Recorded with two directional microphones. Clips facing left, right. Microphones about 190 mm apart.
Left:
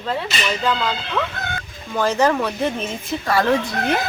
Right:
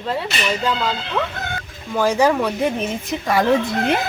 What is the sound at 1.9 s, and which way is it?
Speech, 10° right (ahead or behind).